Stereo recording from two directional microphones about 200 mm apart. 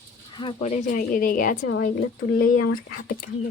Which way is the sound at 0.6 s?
35° left (ahead or behind).